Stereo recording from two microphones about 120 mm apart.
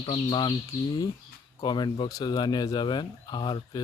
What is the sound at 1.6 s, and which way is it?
Speech, 35° left (ahead or behind).